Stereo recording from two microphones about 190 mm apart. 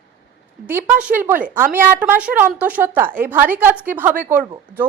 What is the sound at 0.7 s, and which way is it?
A woman's voice, 10° right (ahead or behind).